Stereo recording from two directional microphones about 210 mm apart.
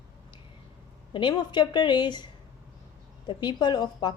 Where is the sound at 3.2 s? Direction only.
20° left (ahead or behind).